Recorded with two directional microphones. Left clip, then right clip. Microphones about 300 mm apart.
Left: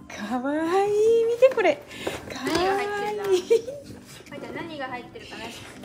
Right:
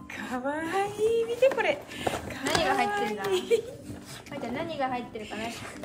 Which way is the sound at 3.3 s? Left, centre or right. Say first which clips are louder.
Left 6 dB; centre.